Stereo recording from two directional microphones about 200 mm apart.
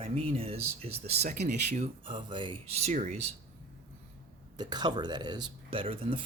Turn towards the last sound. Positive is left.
turn(degrees=-25)  # may be behind; listen again after turning